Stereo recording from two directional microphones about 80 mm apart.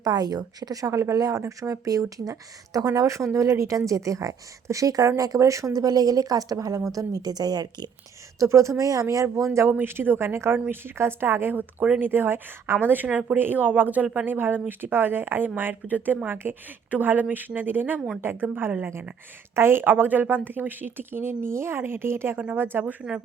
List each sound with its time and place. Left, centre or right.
0.0 s a woman's voice: right
8.4 s speech: right
9.7 s a woman's voice: right